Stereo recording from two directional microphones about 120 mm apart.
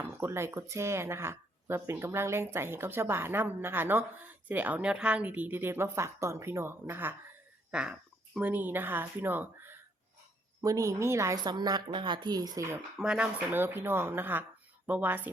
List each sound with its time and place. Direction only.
0.0 s speech: 20° right (ahead or behind)
7.7 s a sound: 10° right (ahead or behind)
8.4 s speech: 15° right (ahead or behind)
10.6 s speech: 30° right (ahead or behind)
11.4 s speech: 35° right (ahead or behind)
13.0 s speech: 5° right (ahead or behind)
13.5 s speech: 15° right (ahead or behind)